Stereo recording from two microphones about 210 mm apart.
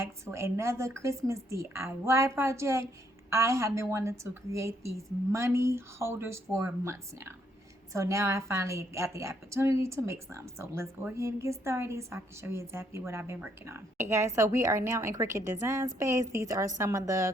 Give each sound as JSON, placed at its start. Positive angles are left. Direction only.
{"t": 0.0, "sound": "speech", "side_deg": -10}